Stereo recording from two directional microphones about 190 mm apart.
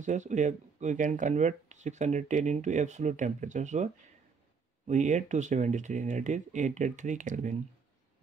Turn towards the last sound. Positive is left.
turn(degrees=-40)  # may be behind; listen again after turning